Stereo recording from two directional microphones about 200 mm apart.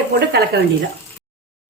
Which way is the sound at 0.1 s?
55° right (ahead or behind).